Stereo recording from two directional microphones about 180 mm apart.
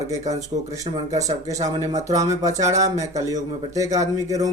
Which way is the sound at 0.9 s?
20° right (ahead or behind).